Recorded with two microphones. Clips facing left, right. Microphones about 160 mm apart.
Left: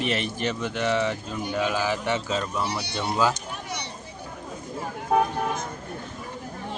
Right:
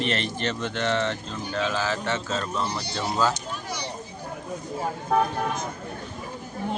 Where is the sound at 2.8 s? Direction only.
65° left (ahead or behind).